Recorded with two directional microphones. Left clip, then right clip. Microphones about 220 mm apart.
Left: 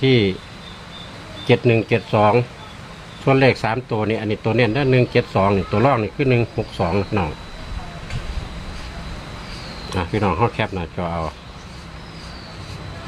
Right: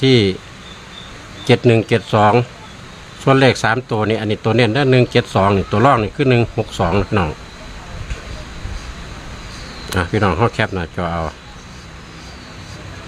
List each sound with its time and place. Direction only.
0.0 s speech: 35° right (ahead or behind)
1.5 s speech: 35° right (ahead or behind)
9.9 s speech: 35° right (ahead or behind)